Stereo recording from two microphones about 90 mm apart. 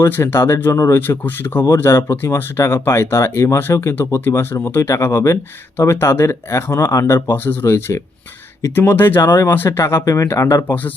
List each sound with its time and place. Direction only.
0.0 s speech: 25° left (ahead or behind)
7.0 s speech: 25° left (ahead or behind)